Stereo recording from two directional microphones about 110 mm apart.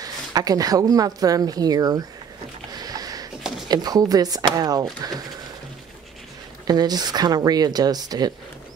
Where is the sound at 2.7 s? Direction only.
35° right (ahead or behind).